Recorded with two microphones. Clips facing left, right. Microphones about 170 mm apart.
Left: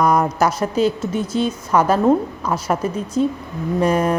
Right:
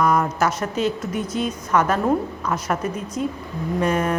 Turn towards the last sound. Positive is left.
turn(degrees=35)  # may be behind; listen again after turning